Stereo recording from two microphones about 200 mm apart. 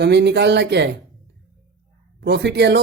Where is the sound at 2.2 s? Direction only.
60° right (ahead or behind).